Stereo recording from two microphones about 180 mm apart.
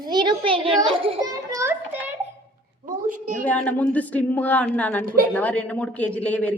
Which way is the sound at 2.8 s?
45° right (ahead or behind).